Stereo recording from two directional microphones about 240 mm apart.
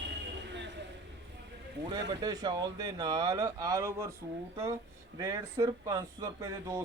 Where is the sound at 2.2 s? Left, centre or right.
Centre.